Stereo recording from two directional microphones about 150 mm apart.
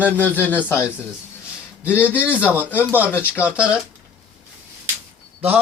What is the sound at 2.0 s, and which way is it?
A man's voice, 10° right (ahead or behind).